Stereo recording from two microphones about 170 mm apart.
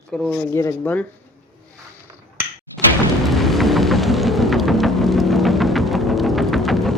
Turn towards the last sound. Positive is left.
turn(degrees=0)  # may be behind; listen again after turning